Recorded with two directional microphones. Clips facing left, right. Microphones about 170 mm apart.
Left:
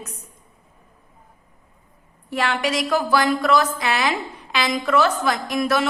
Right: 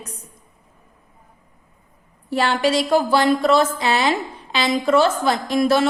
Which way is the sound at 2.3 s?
30° right (ahead or behind).